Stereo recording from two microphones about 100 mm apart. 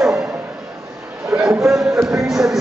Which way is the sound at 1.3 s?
20° right (ahead or behind).